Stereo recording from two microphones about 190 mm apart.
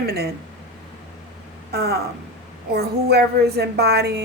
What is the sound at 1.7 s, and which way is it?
Speech, 55° right (ahead or behind).